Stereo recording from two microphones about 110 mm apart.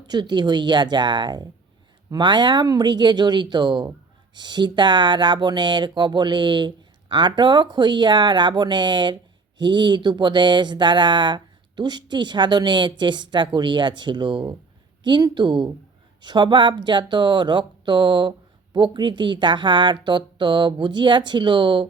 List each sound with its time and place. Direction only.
0.1 s speech: 40° right (ahead or behind)